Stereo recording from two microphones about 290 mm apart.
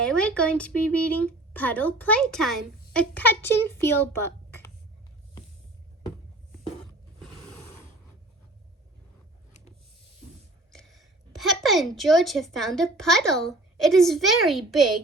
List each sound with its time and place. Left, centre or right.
0.0 s speech: centre
10.7 s a sound: centre
11.9 s speech: centre